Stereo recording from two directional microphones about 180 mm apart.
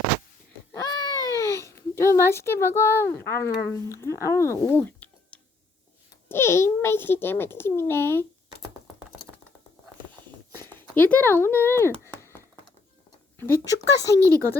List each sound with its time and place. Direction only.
0.7 s babbling: 20° left (ahead or behind)
3.7 s a child's voice: 15° left (ahead or behind)
10.6 s a sound: 10° left (ahead or behind)
13.4 s a child's voice: 15° left (ahead or behind)